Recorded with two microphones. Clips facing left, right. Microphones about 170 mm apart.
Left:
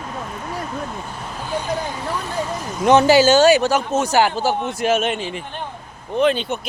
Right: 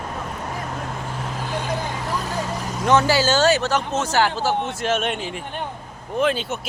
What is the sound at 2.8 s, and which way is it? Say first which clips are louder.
Speech: left 6 dB; 20° left (ahead or behind).